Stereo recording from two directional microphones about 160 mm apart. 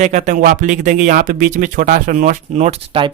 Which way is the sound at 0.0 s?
50° right (ahead or behind).